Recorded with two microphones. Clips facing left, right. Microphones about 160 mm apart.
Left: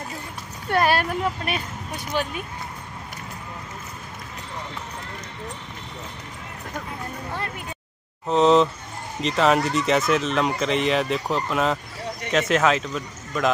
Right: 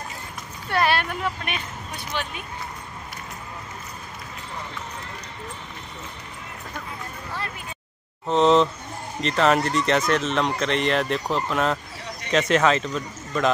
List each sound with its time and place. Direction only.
0.7 s speech: 45° left (ahead or behind)
8.3 s speech: centre (ahead or behind)